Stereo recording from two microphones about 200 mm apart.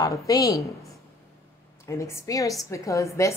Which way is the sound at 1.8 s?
15° left (ahead or behind).